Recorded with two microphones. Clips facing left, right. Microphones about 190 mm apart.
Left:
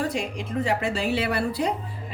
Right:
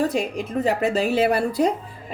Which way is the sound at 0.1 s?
45° right (ahead or behind).